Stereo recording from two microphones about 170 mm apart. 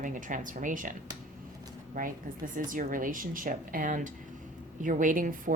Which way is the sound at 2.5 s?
50° right (ahead or behind).